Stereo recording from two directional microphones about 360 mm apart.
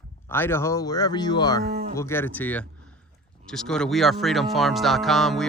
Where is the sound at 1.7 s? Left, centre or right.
Right.